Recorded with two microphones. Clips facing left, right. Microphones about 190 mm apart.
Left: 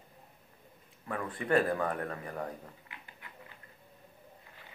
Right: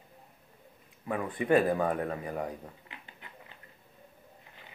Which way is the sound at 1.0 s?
15° right (ahead or behind).